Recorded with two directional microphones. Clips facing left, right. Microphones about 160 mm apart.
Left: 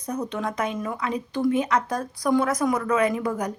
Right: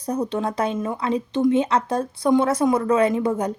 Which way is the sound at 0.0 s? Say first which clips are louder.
Right 4 dB; 30° right (ahead or behind).